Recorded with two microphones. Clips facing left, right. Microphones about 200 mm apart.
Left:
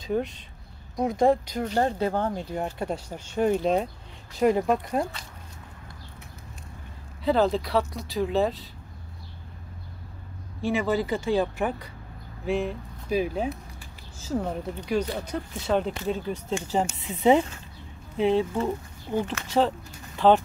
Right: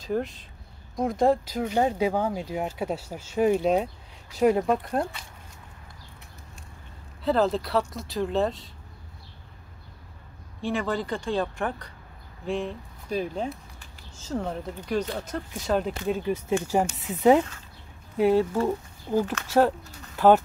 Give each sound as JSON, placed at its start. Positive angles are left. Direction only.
{"t": 0.0, "sound": "speech", "side_deg": 0}
{"t": 7.2, "sound": "speech", "side_deg": 0}
{"t": 10.6, "sound": "speech", "side_deg": 5}